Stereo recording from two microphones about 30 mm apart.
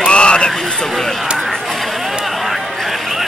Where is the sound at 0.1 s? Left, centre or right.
Left.